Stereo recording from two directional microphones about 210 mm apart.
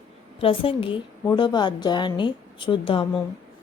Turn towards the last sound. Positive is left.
turn(degrees=25)  # may be behind; listen again after turning